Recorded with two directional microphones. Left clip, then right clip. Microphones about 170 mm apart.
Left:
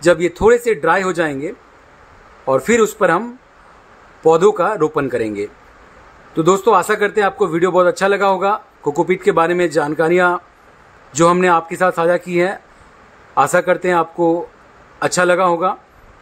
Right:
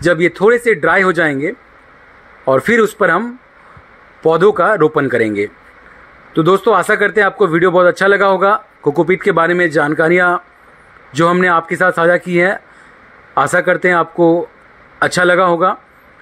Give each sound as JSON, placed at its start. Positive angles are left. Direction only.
{"t": 0.0, "sound": "a man's voice", "side_deg": -20}